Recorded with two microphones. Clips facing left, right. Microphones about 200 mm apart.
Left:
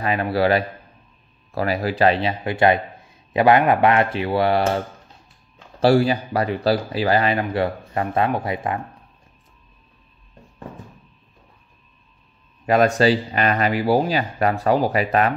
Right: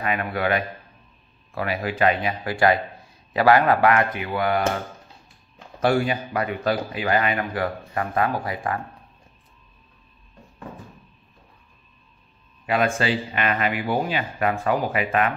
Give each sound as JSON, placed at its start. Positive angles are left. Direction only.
{"t": 0.0, "sound": "a man's voice", "side_deg": 30}
{"t": 5.8, "sound": "speech", "side_deg": 35}
{"t": 12.6, "sound": "speech", "side_deg": 40}